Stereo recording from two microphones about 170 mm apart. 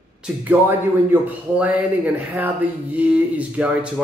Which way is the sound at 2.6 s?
10° right (ahead or behind).